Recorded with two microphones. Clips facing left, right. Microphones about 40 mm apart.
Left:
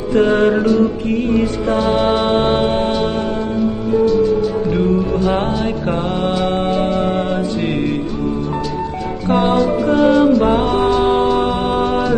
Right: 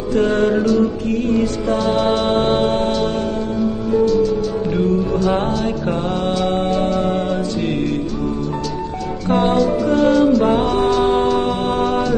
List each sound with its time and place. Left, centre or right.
0.1 s music: left
9.9 s music: centre